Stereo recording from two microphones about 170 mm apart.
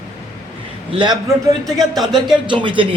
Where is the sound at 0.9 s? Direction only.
30° right (ahead or behind).